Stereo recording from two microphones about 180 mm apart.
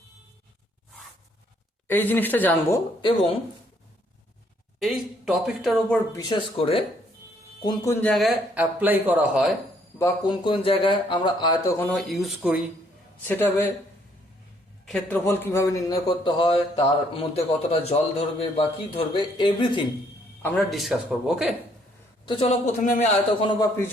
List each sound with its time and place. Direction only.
1.9 s a woman's voice: 10° left (ahead or behind)
4.8 s speech: centre (ahead or behind)
6.1 s a man's voice: 25° left (ahead or behind)
8.0 s speech: centre (ahead or behind)
10.4 s a man's voice: 30° left (ahead or behind); by 12.6 s 5° right (ahead or behind)
13.2 s a woman's voice: 10° left (ahead or behind)
14.8 s a man's voice: 5° left (ahead or behind); by 19.9 s 25° left (ahead or behind)
20.4 s speech: 5° left (ahead or behind)
22.3 s a man's voice: 35° left (ahead or behind)
23.5 s a woman's voice: 15° left (ahead or behind)